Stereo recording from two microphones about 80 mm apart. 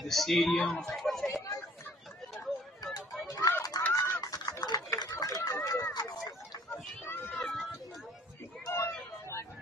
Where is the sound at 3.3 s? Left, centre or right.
Left.